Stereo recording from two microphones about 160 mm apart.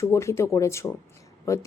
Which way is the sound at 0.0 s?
15° left (ahead or behind).